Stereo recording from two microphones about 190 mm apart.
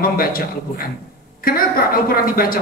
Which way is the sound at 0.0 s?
50° left (ahead or behind).